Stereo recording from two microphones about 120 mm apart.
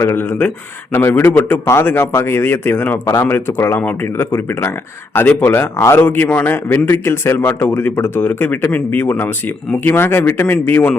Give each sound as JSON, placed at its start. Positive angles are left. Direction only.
{"t": 0.0, "sound": "a man's voice", "side_deg": 20}